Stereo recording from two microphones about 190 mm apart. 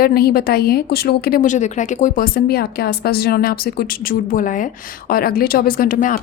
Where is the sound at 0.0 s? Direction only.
55° left (ahead or behind).